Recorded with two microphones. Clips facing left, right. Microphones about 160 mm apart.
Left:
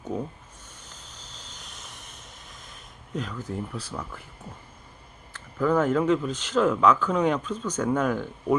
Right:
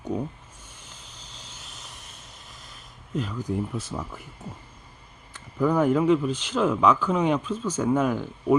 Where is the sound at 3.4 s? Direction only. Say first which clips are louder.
Right 4 dB; 20° right (ahead or behind).